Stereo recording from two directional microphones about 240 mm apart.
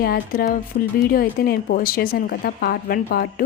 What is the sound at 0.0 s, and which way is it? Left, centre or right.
Speech, left.